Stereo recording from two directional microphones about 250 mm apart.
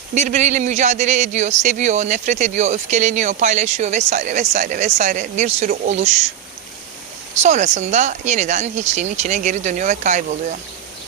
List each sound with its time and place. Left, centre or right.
0.1 s speech: right
7.4 s speech: right